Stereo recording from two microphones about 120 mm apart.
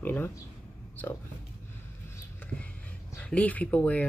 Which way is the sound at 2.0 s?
20° left (ahead or behind).